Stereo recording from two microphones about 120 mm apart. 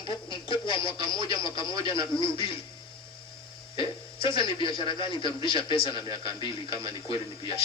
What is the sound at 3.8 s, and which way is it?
Speech, 45° left (ahead or behind).